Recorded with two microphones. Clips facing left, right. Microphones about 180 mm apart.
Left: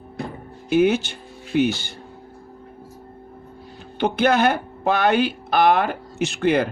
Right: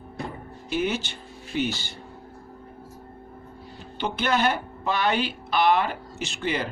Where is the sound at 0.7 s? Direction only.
55° left (ahead or behind).